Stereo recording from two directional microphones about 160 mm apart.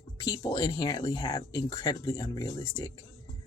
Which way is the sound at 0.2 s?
25° left (ahead or behind).